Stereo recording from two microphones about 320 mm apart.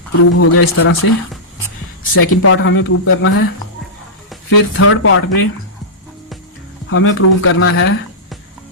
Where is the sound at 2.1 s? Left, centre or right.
Left.